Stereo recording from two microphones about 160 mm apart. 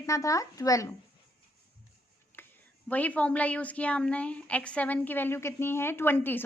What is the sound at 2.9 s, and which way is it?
A woman's voice, 10° left (ahead or behind).